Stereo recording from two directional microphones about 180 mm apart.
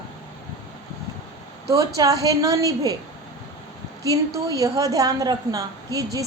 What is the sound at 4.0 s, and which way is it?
A woman's voice, 20° right (ahead or behind).